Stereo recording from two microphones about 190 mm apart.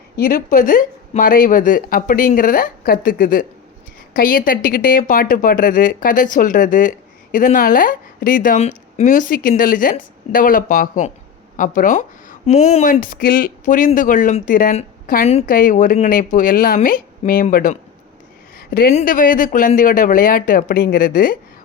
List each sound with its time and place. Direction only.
0.2 s a woman's voice: 50° left (ahead or behind)